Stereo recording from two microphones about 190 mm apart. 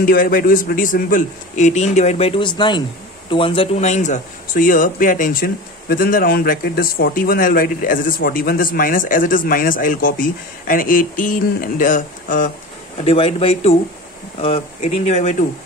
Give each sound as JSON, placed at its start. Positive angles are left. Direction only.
{"t": 0.0, "sound": "a man's voice", "side_deg": 50}
{"t": 12.9, "sound": "a man's voice", "side_deg": 30}